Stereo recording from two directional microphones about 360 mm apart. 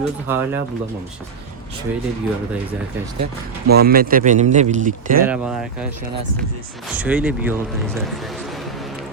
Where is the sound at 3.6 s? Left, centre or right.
Right.